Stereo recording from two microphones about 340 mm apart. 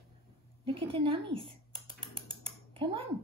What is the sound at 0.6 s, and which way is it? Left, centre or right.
Typing, centre.